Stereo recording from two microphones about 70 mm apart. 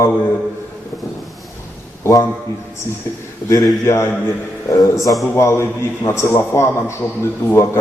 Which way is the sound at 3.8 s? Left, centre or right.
Left.